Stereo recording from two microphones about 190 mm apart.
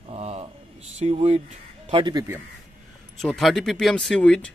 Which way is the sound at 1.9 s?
25° right (ahead or behind).